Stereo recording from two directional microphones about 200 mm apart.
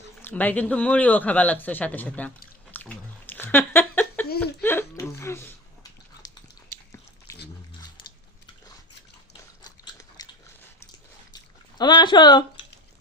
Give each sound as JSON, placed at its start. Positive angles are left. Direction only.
{"t": 0.2, "sound": "speech", "side_deg": 10}
{"t": 2.7, "sound": "bathtub", "side_deg": 10}
{"t": 4.4, "sound": "a sound", "side_deg": 10}
{"t": 6.2, "sound": "dog", "side_deg": 20}
{"t": 9.4, "sound": "biting", "side_deg": 20}
{"t": 11.8, "sound": "speech", "side_deg": 20}